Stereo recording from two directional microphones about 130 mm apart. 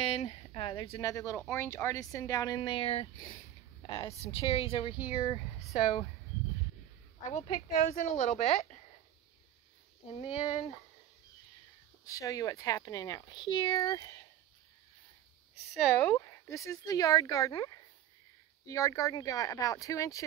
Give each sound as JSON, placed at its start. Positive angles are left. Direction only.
{"t": 0.0, "sound": "a sound", "side_deg": 55}
{"t": 0.6, "sound": "a woman's voice", "side_deg": 45}
{"t": 0.9, "sound": "speech", "side_deg": 25}
{"t": 2.7, "sound": "a woman's voice", "side_deg": 45}
{"t": 5.1, "sound": "speech", "side_deg": 35}
{"t": 5.7, "sound": "a woman's voice", "side_deg": 50}
{"t": 7.2, "sound": "speech", "side_deg": 70}
{"t": 12.1, "sound": "speech", "side_deg": 25}
{"t": 16.0, "sound": "speech", "side_deg": 20}
{"t": 18.7, "sound": "speech", "side_deg": 25}